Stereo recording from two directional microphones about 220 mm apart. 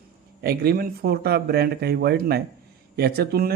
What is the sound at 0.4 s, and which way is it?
Speech, 45° right (ahead or behind).